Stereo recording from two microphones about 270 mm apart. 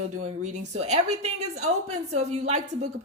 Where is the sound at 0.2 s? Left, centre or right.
Right.